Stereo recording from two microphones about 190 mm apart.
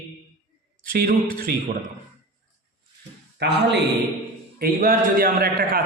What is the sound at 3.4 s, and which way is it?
Speech, 60° right (ahead or behind).